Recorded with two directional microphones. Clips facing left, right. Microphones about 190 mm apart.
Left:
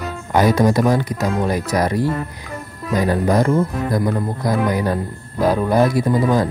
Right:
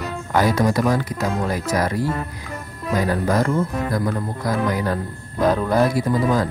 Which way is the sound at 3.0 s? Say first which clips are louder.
Left 3 dB; 20° left (ahead or behind).